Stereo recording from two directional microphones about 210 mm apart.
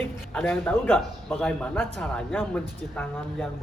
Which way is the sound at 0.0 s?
10° left (ahead or behind).